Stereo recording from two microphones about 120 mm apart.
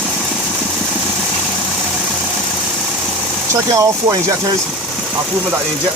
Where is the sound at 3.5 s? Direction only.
25° right (ahead or behind).